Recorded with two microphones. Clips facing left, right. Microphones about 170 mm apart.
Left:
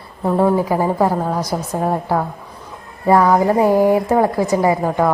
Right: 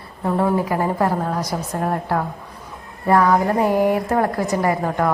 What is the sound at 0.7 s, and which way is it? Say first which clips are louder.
A woman's voice: left 3 dB; 10° left (ahead or behind).